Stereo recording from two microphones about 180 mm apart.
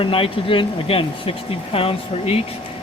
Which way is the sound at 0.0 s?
30° left (ahead or behind).